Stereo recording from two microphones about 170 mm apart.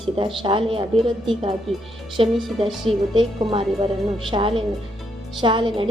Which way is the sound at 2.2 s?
30° right (ahead or behind).